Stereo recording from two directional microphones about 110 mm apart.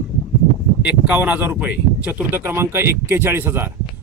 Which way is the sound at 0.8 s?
10° right (ahead or behind).